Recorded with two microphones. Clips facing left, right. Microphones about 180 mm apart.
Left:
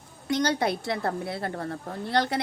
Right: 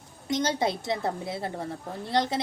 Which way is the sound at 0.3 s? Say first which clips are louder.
Left 1 dB; 20° right (ahead or behind).